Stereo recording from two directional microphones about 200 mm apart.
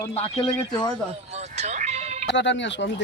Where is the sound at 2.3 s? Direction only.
65° left (ahead or behind).